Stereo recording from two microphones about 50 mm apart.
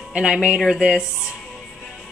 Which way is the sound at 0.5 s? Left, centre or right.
Centre.